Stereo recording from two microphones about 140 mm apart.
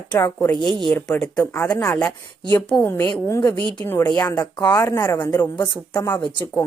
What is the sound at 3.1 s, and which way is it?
A woman's voice, 20° left (ahead or behind).